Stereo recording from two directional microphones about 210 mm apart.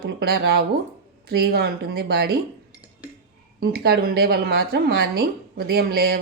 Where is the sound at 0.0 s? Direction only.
50° right (ahead or behind).